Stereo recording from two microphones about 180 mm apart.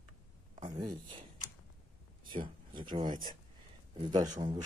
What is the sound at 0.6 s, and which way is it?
Speech, 25° right (ahead or behind).